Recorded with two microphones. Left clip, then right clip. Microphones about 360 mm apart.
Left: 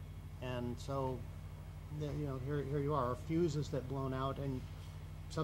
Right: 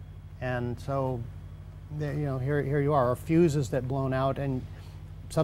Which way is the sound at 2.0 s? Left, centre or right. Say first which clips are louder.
Right 10 dB; right.